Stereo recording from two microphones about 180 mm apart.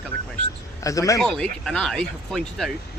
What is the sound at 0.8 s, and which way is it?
Speech, 20° left (ahead or behind).